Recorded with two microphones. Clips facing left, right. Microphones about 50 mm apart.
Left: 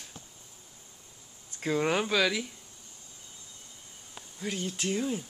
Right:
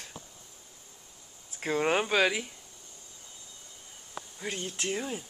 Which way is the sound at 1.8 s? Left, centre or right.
Centre.